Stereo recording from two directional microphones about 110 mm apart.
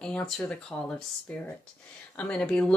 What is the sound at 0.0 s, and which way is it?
Speech, 10° left (ahead or behind).